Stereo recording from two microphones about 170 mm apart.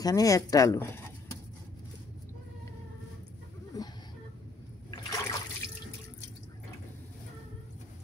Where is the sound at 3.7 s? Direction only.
25° left (ahead or behind).